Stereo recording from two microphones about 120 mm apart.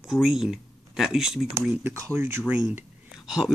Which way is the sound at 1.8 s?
20° right (ahead or behind).